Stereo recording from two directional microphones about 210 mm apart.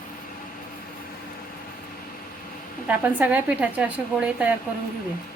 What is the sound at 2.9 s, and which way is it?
A woman's voice, 5° right (ahead or behind).